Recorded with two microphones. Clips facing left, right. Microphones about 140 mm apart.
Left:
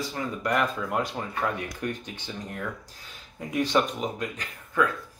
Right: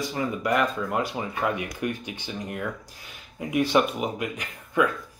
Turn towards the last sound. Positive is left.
turn(degrees=-15)  # may be behind; listen again after turning